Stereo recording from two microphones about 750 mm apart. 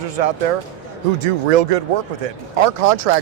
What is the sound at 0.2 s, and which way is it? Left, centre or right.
Speech, right.